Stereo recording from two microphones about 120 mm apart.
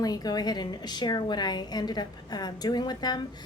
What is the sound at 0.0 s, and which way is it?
A woman's voice, 35° left (ahead or behind).